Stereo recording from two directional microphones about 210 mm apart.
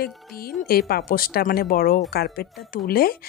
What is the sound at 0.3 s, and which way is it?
A woman's voice, 45° left (ahead or behind).